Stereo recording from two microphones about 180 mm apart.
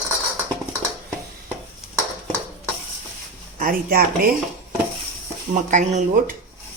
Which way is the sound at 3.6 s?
50° right (ahead or behind).